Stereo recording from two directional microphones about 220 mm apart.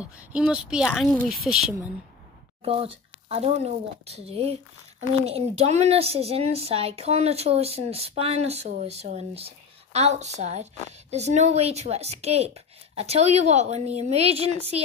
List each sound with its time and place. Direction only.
0.0 s a woman's voice: 5° right (ahead or behind)
2.6 s a woman's voice: 25° right (ahead or behind)